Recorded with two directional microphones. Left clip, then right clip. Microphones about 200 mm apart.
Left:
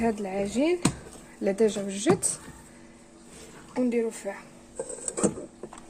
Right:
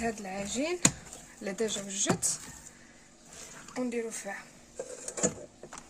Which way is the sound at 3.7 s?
20° left (ahead or behind).